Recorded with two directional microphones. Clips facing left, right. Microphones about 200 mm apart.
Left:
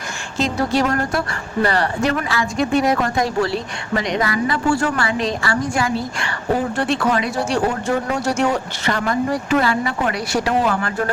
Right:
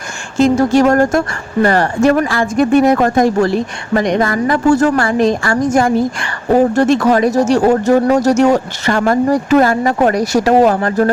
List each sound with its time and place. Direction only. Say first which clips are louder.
0.3 s speech: right 9 dB; 50° right (ahead or behind)